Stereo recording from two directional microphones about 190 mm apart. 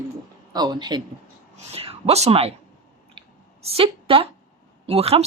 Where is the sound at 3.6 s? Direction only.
30° right (ahead or behind).